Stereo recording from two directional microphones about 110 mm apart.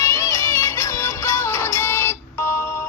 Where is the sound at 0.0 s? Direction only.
30° left (ahead or behind).